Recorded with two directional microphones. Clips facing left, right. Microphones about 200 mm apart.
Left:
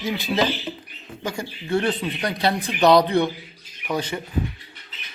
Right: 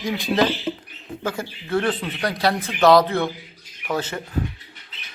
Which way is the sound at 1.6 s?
20° left (ahead or behind).